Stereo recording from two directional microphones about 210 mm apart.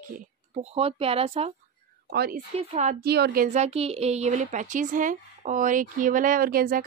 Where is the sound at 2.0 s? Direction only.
45° right (ahead or behind).